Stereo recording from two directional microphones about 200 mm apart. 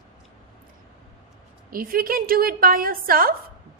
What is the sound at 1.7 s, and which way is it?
A woman's voice, 45° right (ahead or behind).